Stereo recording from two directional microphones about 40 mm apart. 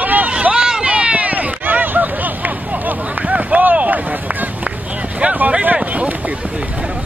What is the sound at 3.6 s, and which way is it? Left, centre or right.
Vehicle, right.